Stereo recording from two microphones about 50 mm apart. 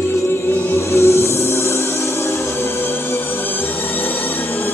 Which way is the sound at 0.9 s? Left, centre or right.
Left.